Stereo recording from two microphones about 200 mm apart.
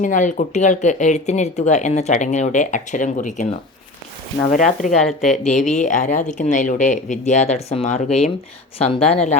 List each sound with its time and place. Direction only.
0.0 s speech: 40° left (ahead or behind)
5.0 s speech: centre (ahead or behind)
5.4 s speech: 35° left (ahead or behind)